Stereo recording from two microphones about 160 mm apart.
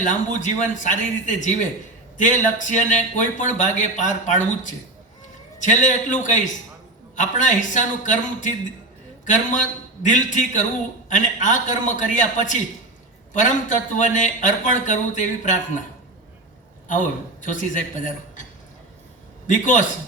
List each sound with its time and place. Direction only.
0.0 s a man's voice: 50° left (ahead or behind)
16.9 s a man's voice: 55° left (ahead or behind)
19.5 s a man's voice: 50° left (ahead or behind)